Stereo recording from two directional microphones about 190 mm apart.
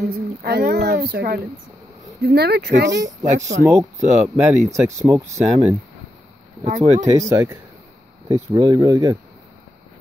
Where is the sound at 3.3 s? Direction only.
40° right (ahead or behind).